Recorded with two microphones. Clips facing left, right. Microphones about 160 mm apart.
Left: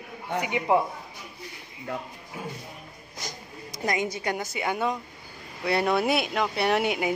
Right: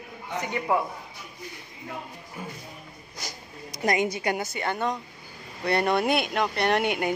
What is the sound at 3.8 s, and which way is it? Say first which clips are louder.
Speech: right 3 dB; 60° right (ahead or behind).